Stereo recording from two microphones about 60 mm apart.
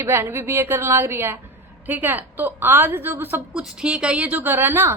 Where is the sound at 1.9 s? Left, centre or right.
Right.